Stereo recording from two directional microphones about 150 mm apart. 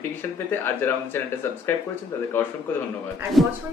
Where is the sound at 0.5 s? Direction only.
15° left (ahead or behind).